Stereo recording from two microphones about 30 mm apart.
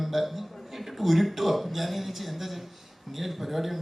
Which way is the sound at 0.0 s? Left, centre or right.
Centre.